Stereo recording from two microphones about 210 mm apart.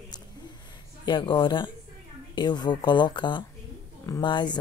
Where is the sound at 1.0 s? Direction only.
20° left (ahead or behind).